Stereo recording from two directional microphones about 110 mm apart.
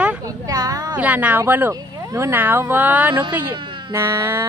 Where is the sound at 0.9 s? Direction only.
10° right (ahead or behind).